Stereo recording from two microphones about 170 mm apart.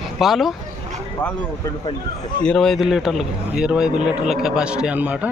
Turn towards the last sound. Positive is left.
turn(degrees=-10)  # may be behind; listen again after turning